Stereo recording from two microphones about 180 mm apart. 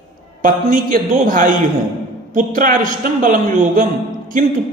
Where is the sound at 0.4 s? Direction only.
50° right (ahead or behind).